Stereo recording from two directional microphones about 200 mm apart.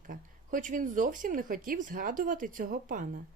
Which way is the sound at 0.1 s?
40° right (ahead or behind).